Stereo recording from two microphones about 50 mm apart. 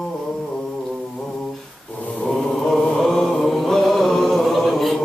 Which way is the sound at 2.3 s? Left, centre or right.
Centre.